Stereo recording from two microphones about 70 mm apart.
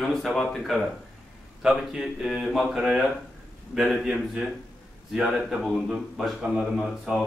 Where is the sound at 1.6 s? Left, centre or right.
Centre.